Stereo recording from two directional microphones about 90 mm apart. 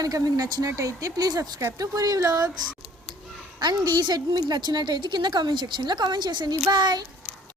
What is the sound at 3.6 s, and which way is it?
A woman's voice, 50° right (ahead or behind).